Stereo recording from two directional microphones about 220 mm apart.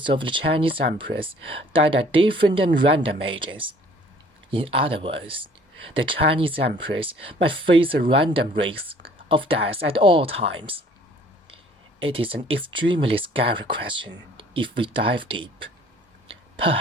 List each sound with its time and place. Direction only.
0.0 s speech: 20° right (ahead or behind)
12.0 s speech: 25° right (ahead or behind)